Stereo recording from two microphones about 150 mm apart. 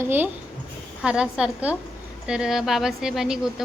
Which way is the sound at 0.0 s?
15° right (ahead or behind).